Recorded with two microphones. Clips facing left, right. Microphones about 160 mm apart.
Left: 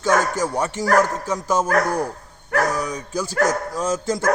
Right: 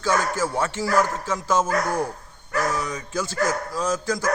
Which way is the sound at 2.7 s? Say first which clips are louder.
Left 2 dB; 10° left (ahead or behind).